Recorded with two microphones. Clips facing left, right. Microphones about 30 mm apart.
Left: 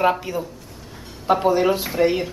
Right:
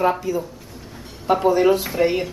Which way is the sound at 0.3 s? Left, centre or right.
Left.